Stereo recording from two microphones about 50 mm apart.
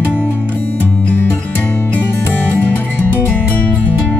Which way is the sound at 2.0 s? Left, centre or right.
Left.